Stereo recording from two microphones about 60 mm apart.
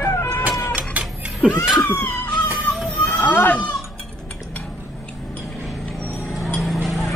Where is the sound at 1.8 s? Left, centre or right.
Left.